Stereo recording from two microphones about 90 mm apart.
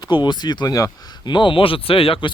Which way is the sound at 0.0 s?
55° left (ahead or behind).